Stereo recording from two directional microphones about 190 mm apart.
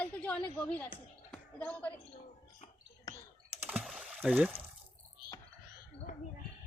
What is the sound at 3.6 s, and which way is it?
Computer keyboard, 5° right (ahead or behind).